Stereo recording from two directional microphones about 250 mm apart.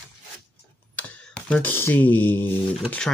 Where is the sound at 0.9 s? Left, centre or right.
Centre.